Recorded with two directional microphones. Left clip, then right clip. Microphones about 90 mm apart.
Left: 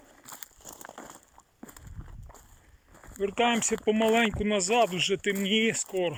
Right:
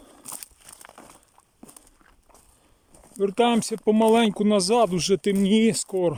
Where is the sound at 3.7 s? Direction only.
60° right (ahead or behind).